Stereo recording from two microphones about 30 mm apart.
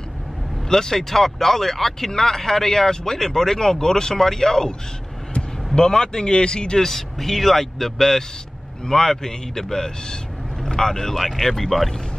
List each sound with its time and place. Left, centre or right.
0.7 s speech: centre
5.8 s a man's voice: left
6.8 s a man's voice: centre
11.1 s speech: centre